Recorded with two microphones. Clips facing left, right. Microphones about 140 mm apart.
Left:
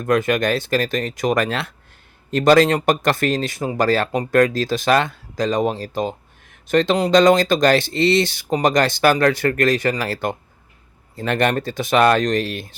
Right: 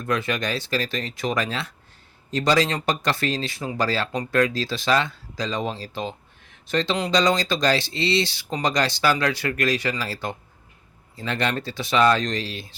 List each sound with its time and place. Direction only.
0.0 s speech: 50° left (ahead or behind)